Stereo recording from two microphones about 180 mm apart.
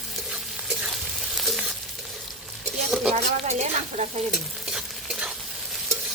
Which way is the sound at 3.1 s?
40° right (ahead or behind).